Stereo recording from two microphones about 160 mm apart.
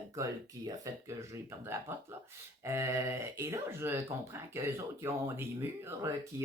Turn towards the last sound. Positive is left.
turn(degrees=-15)  # may be behind; listen again after turning